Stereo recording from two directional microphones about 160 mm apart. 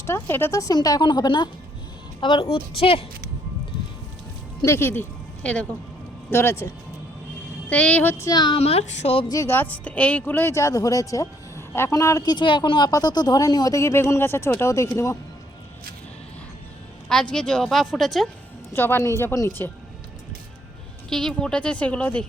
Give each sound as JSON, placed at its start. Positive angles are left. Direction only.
{"t": 0.0, "sound": "a woman's voice", "side_deg": 15}
{"t": 4.6, "sound": "speech", "side_deg": 15}
{"t": 8.3, "sound": "speech", "side_deg": 25}
{"t": 8.5, "sound": "a woman's voice", "side_deg": 40}
{"t": 9.3, "sound": "speech", "side_deg": 15}
{"t": 17.1, "sound": "a woman's voice", "side_deg": 5}
{"t": 18.7, "sound": "speech", "side_deg": 15}
{"t": 21.1, "sound": "speech", "side_deg": 5}